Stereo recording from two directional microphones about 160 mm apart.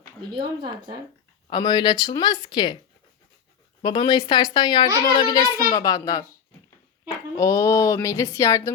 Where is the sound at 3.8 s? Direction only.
25° left (ahead or behind).